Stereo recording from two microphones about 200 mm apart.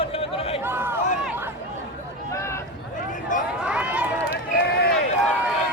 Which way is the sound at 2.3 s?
15° left (ahead or behind).